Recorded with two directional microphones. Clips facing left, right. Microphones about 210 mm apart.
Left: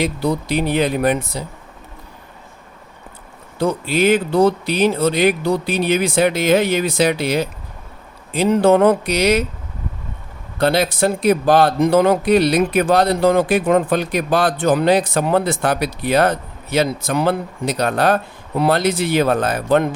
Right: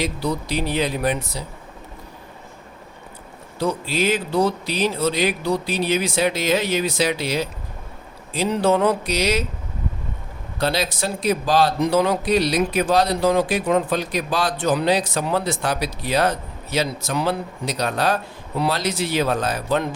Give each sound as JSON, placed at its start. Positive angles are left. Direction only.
{"t": 0.0, "sound": "speech", "side_deg": 55}
{"t": 3.6, "sound": "speech", "side_deg": 55}
{"t": 10.6, "sound": "speech", "side_deg": 55}